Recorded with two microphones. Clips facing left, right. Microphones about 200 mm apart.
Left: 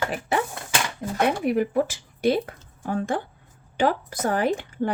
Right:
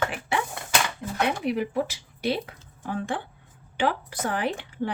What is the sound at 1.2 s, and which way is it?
Speech, 50° left (ahead or behind).